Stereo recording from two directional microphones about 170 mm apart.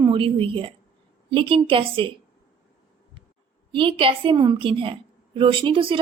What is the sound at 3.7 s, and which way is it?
A woman's voice, 30° right (ahead or behind).